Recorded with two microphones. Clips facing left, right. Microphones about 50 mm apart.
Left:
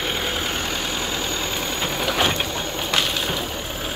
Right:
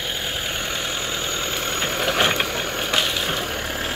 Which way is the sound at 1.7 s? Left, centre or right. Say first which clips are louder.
Right 3 dB; right.